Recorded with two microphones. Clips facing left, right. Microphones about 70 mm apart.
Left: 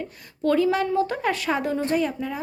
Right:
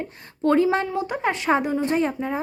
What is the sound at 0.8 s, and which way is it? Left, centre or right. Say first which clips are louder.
A woman's voice: left 2 dB; centre.